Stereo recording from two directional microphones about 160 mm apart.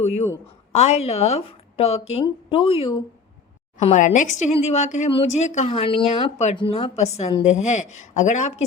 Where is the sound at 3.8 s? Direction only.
45° left (ahead or behind).